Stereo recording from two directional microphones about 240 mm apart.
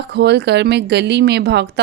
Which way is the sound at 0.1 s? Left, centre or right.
Right.